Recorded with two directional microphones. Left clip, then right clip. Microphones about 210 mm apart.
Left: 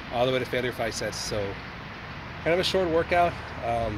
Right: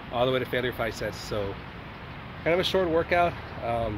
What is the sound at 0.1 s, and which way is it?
Speech, 10° left (ahead or behind).